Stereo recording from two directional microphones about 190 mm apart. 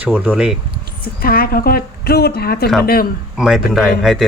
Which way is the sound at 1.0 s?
50° left (ahead or behind).